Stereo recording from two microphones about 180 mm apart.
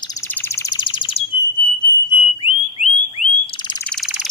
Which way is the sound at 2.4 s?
35° left (ahead or behind).